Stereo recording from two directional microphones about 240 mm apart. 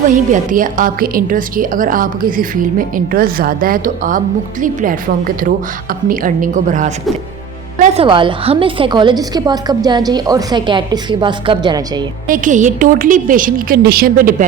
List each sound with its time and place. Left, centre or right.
0.1 s a woman's voice: right; by 12.0 s centre
12.3 s a woman's voice: right